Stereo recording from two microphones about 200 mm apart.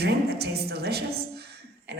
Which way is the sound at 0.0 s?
55° right (ahead or behind).